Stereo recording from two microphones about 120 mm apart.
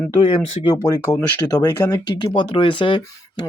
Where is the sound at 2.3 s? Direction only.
45° left (ahead or behind).